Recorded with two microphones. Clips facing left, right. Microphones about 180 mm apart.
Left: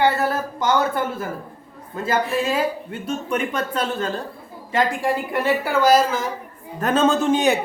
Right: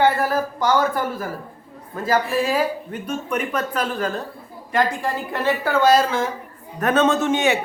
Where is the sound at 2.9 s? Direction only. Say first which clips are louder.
Left 1 dB; 30° left (ahead or behind).